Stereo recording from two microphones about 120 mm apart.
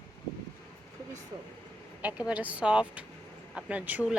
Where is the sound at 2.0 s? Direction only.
10° right (ahead or behind).